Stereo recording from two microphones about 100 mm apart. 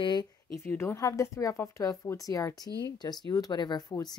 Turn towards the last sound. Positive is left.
turn(degrees=40)  # may be behind; listen again after turning